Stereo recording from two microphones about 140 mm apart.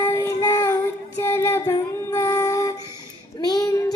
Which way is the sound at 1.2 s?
20° left (ahead or behind).